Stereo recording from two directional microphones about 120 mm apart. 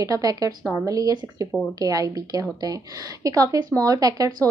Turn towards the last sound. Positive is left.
turn(degrees=-30)  # may be behind; listen again after turning